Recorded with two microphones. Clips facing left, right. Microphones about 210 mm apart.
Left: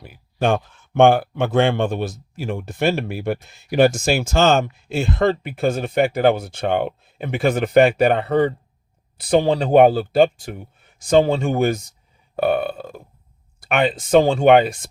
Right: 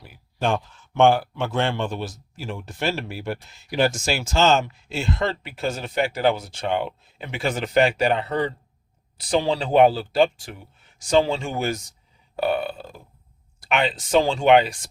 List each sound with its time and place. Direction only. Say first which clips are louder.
0.0 s speech: left 5 dB; 55° left (ahead or behind)